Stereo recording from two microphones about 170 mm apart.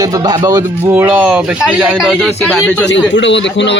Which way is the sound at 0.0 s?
20° right (ahead or behind).